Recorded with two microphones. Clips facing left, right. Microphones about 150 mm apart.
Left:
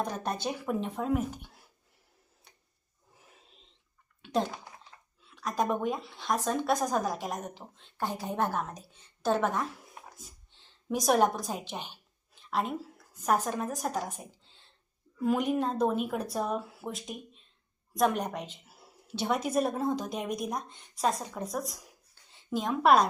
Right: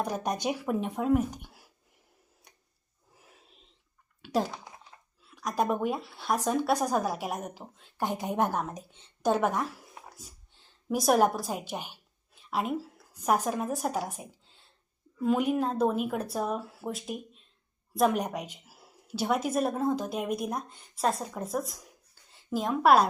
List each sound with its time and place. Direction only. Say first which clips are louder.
0.0 s a woman's voice: right 2 dB; 10° right (ahead or behind)
3.2 s a sound: right 1 dB; centre (ahead or behind)
4.2 s a woman's voice: right 1 dB; 10° right (ahead or behind)
8.0 s a woman's voice: right 3 dB; 20° right (ahead or behind)
10.8 s a woman's voice: right 1 dB; 5° right (ahead or behind)